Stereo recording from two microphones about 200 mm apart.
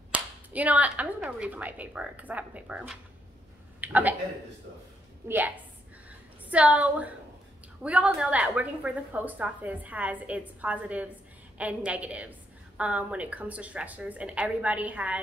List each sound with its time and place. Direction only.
0.1 s a woman's voice: 5° right (ahead or behind)
5.2 s a woman's voice: 15° right (ahead or behind)
6.5 s a woman's voice: 5° right (ahead or behind)